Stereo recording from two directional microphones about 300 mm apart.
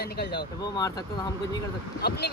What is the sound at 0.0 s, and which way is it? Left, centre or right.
Speech, left.